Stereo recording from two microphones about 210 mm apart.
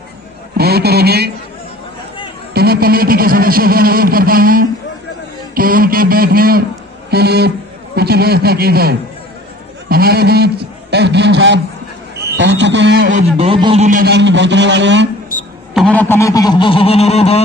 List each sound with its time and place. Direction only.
0.6 s a man's voice: 50° right (ahead or behind)
2.5 s a man's voice: 45° right (ahead or behind)
13.4 s a man's voice: 25° right (ahead or behind)
13.8 s a man's voice: 45° right (ahead or behind)
15.7 s a sound: 5° left (ahead or behind); by 17.4 s 30° left (ahead or behind)